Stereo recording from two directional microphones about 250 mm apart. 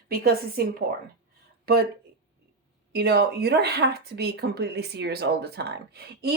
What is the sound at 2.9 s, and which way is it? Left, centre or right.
Speech, right.